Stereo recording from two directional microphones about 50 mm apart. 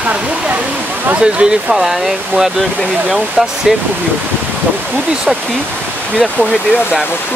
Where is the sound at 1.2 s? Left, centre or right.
Centre.